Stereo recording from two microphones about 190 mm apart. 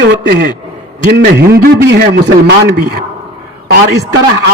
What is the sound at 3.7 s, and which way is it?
Speech, 60° right (ahead or behind).